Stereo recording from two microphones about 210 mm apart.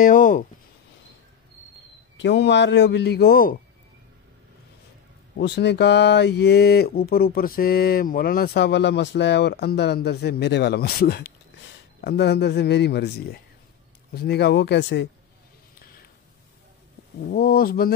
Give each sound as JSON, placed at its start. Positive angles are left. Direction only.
{"t": 0.0, "sound": "speech", "side_deg": 40}
{"t": 2.1, "sound": "a man's voice", "side_deg": 55}
{"t": 5.4, "sound": "a man's voice", "side_deg": 55}
{"t": 17.3, "sound": "speech", "side_deg": 45}